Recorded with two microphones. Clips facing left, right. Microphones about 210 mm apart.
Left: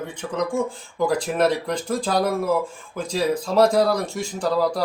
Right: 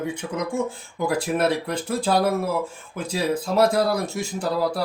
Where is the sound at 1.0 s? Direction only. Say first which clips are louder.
Left 2 dB; 10° right (ahead or behind).